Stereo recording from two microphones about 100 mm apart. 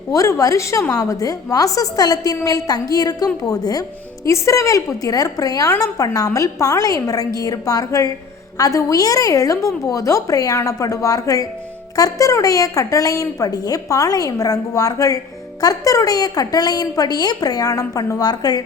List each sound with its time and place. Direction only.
0.1 s a woman's voice: 35° left (ahead or behind)